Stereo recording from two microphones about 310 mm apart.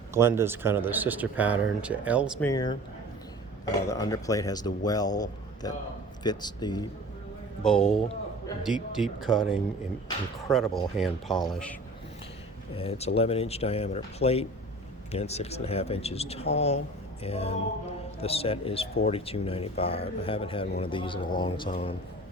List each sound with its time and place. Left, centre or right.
0.1 s speech: centre
2.4 s speech: centre
3.8 s speech: centre
7.6 s speech: centre
7.9 s a sound: centre
8.6 s speech: centre
10.9 s speech: centre
12.7 s speech: centre